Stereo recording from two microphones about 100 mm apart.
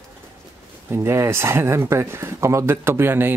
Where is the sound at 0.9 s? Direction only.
25° right (ahead or behind).